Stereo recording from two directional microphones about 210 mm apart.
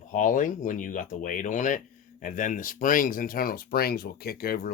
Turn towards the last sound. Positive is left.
turn(degrees=45)  # may be behind; listen again after turning